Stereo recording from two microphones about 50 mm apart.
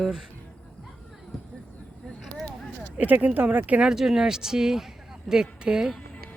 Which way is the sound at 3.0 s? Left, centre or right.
Right.